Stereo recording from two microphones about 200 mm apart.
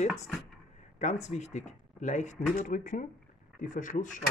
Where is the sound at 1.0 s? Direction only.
35° left (ahead or behind).